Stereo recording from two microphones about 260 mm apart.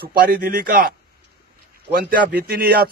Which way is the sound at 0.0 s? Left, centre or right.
Right.